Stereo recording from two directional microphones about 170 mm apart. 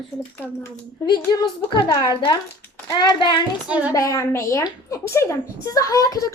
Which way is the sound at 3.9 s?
20° left (ahead or behind).